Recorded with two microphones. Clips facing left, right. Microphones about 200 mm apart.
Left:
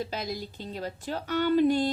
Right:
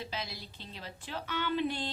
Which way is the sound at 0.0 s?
45° left (ahead or behind).